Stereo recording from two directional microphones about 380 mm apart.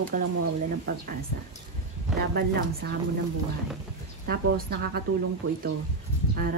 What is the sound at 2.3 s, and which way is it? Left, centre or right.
Speech, right.